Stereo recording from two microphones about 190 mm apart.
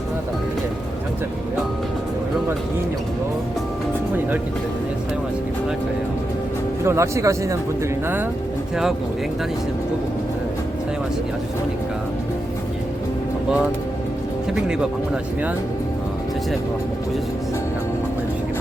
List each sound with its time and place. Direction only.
6.8 s speech: 15° right (ahead or behind)
14.7 s speech: 5° right (ahead or behind)